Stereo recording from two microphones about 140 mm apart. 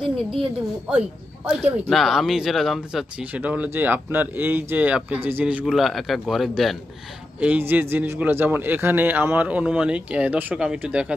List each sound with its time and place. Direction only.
0.0 s a woman's voice: 40° right (ahead or behind)
0.9 s speech: 5° right (ahead or behind)
7.3 s a man's voice: 10° right (ahead or behind)